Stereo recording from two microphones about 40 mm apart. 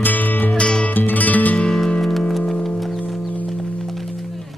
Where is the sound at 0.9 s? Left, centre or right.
Left.